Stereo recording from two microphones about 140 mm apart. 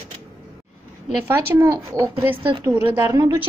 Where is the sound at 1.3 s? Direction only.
15° right (ahead or behind).